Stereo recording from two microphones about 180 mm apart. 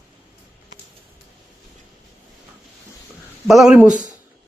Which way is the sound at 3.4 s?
Centre (ahead or behind).